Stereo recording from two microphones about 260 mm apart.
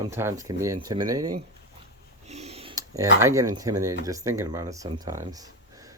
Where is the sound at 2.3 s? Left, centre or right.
Right.